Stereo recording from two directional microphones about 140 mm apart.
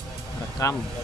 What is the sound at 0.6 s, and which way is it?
Speech, 25° left (ahead or behind).